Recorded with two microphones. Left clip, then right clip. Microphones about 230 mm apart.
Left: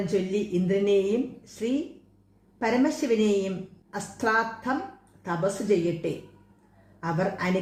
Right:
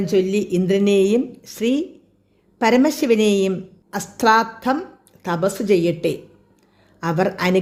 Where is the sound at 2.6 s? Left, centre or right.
Right.